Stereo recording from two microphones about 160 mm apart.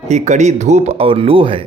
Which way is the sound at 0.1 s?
45° right (ahead or behind).